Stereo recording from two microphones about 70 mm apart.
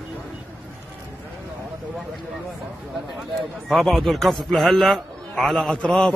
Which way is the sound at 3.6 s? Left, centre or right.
Centre.